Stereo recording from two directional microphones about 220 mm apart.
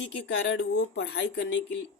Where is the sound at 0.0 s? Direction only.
55° left (ahead or behind).